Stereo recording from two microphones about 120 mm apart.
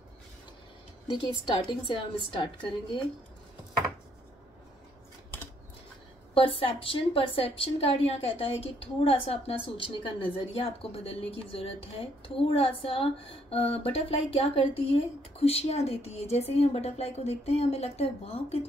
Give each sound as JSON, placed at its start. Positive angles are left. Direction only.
{"t": 1.0, "sound": "a woman's voice", "side_deg": 40}
{"t": 6.3, "sound": "a woman's voice", "side_deg": 45}